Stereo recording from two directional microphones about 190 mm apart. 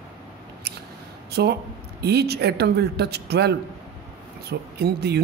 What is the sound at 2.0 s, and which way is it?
Speech, 60° right (ahead or behind).